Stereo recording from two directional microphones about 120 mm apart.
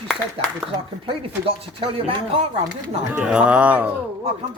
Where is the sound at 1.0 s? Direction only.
50° right (ahead or behind).